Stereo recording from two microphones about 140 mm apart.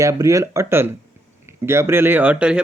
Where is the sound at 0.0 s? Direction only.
20° right (ahead or behind).